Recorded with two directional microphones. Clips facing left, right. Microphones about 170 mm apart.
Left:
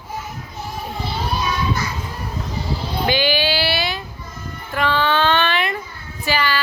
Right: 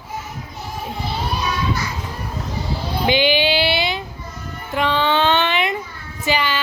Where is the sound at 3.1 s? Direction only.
20° right (ahead or behind).